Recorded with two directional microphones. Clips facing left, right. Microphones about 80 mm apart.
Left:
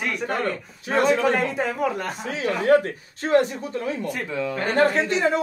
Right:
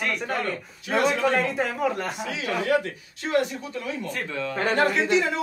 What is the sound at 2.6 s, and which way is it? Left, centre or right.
Speech, left.